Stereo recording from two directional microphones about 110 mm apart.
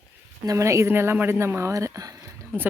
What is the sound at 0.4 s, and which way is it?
Speech, 25° right (ahead or behind).